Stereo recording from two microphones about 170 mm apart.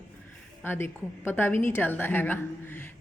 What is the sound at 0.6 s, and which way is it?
A woman's voice, 15° left (ahead or behind).